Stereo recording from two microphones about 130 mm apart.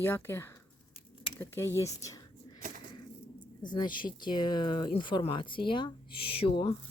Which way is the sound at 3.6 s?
35° left (ahead or behind).